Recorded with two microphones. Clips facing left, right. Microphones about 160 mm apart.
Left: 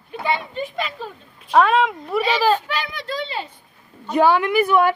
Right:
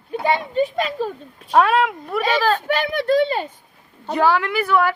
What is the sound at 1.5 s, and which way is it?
Speech, centre (ahead or behind).